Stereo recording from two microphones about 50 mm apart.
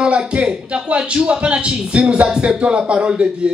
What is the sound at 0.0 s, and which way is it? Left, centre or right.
A man's voice, right.